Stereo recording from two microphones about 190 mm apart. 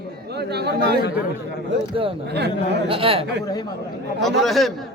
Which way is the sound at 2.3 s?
60° right (ahead or behind).